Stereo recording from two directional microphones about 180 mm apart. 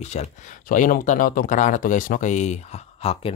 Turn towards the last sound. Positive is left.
turn(degrees=30)  # may be behind; listen again after turning